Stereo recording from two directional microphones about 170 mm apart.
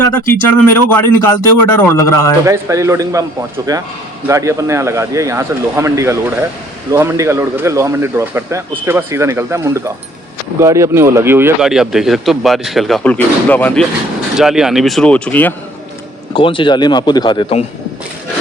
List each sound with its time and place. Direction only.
0.4 s speech: 10° left (ahead or behind)
2.4 s a man's voice: 20° right (ahead or behind)
11.6 s speech: 5° right (ahead or behind)
14.3 s speech: 5° right (ahead or behind)
16.3 s speech: 30° left (ahead or behind)